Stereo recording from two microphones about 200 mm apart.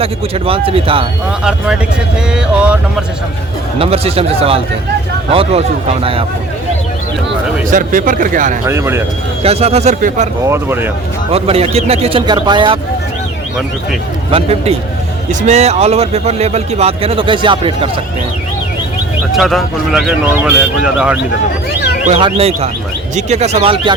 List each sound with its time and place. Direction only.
0.0 s a man's voice: 30° right (ahead or behind)
2.3 s speech: 5° right (ahead or behind)
3.8 s a man's voice: 30° right (ahead or behind)
7.7 s a man's voice: 40° right (ahead or behind)
8.6 s speech: 15° right (ahead or behind)
9.4 s a man's voice: 30° right (ahead or behind)
10.4 s speech: 10° right (ahead or behind)
11.3 s a man's voice: 30° right (ahead or behind)
14.3 s a man's voice: 30° right (ahead or behind)
19.4 s speech: centre (ahead or behind)
21.7 s speech: 55° left (ahead or behind)
22.0 s a man's voice: 30° right (ahead or behind)